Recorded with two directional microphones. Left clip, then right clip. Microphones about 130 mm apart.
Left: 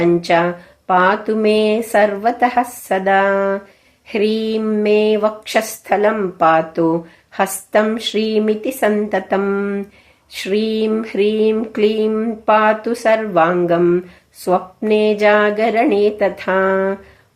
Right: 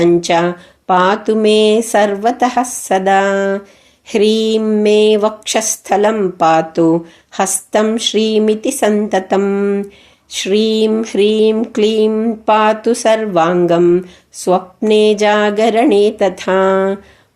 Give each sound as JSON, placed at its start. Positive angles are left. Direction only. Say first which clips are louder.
{"t": 0.0, "sound": "speech", "louder": "right 2 dB", "side_deg": -35}